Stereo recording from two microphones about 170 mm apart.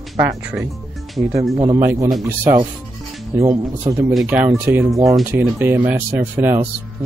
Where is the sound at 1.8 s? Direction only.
15° right (ahead or behind).